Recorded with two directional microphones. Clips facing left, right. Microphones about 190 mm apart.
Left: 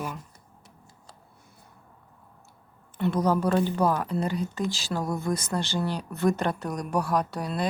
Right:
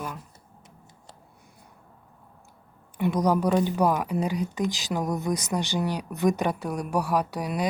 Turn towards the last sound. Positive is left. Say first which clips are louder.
# right 1 dB
turn(degrees=-10)  # may be behind; listen again after turning